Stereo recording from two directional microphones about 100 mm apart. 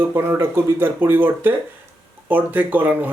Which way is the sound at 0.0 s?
25° right (ahead or behind).